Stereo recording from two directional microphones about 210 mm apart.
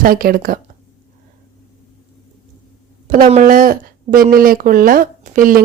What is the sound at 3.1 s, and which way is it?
Speech, 35° right (ahead or behind).